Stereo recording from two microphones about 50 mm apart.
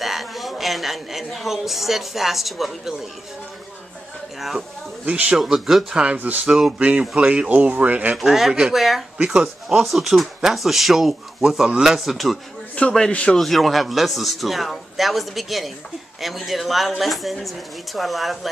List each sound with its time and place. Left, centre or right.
0.0 s a woman's voice: centre
4.4 s speech: centre
5.0 s speech: right
5.4 s speech: centre
6.1 s speech: right
6.4 s a man's voice: centre
6.8 s speech: right
8.2 s a man's voice: centre
9.2 s a man's voice: centre
9.7 s a man's voice: centre
12.8 s a man's voice: left
13.4 s speech: centre